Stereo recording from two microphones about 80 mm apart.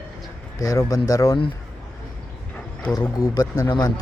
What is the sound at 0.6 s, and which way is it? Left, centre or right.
Speech, left.